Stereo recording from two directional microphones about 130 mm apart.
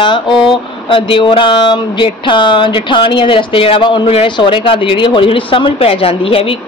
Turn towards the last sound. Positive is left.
turn(degrees=45)  # may be behind; listen again after turning